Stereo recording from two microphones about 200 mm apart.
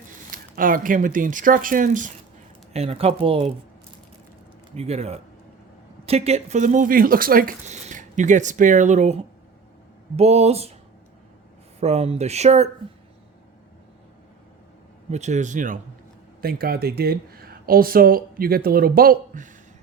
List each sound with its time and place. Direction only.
0.3 s speech: 45° right (ahead or behind)
2.7 s speech: 30° right (ahead or behind)
4.8 s speech: 30° right (ahead or behind)
11.8 s speech: 30° right (ahead or behind)
15.1 s speech: 35° right (ahead or behind)